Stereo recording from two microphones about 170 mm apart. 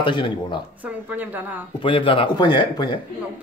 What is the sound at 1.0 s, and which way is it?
Speech, 10° right (ahead or behind).